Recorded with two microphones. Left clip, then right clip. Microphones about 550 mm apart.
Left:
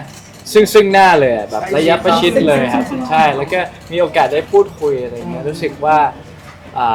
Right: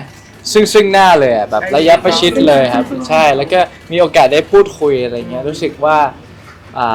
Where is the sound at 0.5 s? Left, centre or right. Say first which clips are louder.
Even; centre.